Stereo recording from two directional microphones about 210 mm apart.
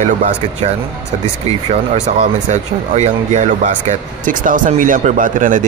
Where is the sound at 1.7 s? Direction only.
30° right (ahead or behind).